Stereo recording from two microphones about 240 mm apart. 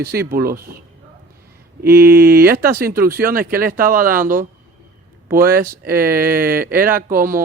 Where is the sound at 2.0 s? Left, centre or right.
Right.